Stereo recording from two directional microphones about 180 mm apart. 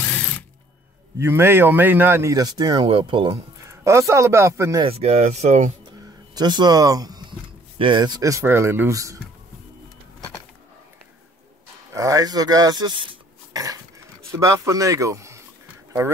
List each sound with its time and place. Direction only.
1.1 s a man's voice: 15° right (ahead or behind)
3.6 s a man's voice: 15° right (ahead or behind)
4.8 s speech: 35° right (ahead or behind)
5.9 s a sound: 25° right (ahead or behind)
7.8 s a man's voice: 25° right (ahead or behind)
11.9 s a man's voice: 20° right (ahead or behind)